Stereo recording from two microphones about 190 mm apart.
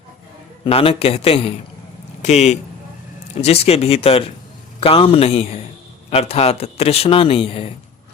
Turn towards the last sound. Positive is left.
turn(degrees=30)  # may be behind; listen again after turning